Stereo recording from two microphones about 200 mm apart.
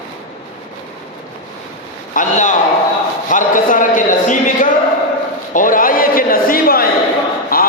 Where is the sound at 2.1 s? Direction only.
35° left (ahead or behind).